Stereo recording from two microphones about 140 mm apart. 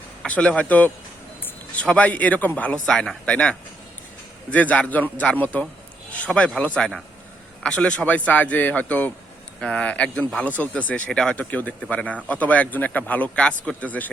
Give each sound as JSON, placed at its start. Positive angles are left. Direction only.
{"t": 0.2, "sound": "speech", "side_deg": 10}